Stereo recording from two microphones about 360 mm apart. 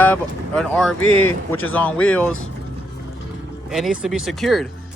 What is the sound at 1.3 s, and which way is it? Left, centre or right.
Speech, left.